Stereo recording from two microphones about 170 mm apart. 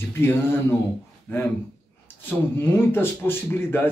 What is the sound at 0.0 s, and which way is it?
Speech, 15° left (ahead or behind).